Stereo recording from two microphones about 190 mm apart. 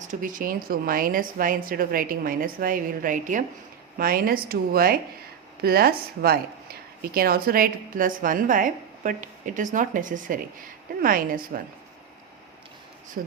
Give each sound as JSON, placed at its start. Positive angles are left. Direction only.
{"t": 0.0, "sound": "a woman's voice", "side_deg": -45}
{"t": 13.2, "sound": "speech", "side_deg": -50}